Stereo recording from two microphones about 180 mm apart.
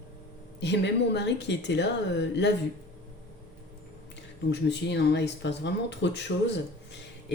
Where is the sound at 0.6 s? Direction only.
70° left (ahead or behind).